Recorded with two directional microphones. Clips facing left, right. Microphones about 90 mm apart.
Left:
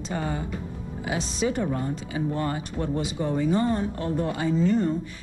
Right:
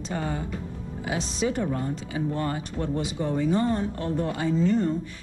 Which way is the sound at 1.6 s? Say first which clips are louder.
Left 1 dB; 15° left (ahead or behind).